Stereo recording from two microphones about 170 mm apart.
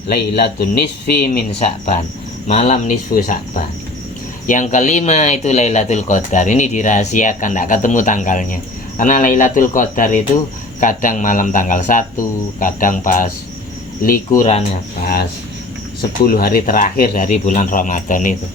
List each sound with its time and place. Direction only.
0.1 s speech: 70° left (ahead or behind)
2.5 s speech: 40° left (ahead or behind)
3.1 s speech: 55° left (ahead or behind)
14.3 s speech: 40° left (ahead or behind)
16.0 s speech: 60° left (ahead or behind)